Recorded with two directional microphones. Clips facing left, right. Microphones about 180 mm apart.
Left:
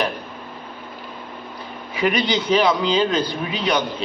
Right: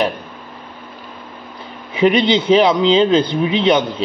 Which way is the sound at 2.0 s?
25° right (ahead or behind).